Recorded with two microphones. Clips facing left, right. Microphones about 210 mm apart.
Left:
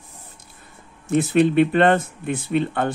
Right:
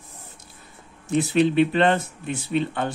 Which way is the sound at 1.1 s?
55° left (ahead or behind).